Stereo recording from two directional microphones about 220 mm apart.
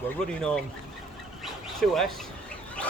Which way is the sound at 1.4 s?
Centre (ahead or behind).